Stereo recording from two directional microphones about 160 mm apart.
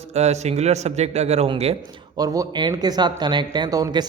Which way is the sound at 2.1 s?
20° right (ahead or behind).